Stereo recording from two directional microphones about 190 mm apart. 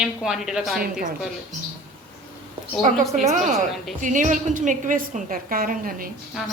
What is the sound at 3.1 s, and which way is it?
Speech, 40° right (ahead or behind).